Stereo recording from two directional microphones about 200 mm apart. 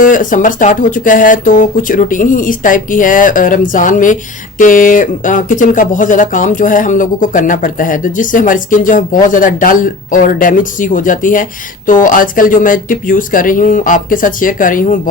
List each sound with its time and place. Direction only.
0.0 s speech: 40° left (ahead or behind)